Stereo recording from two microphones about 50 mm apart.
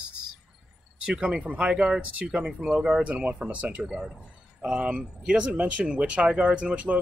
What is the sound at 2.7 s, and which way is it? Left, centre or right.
Speech, right.